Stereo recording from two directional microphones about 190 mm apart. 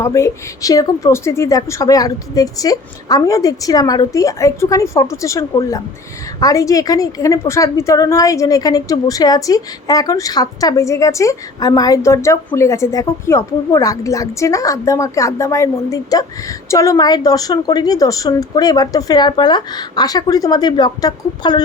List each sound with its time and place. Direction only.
0.0 s a woman's voice: 15° left (ahead or behind)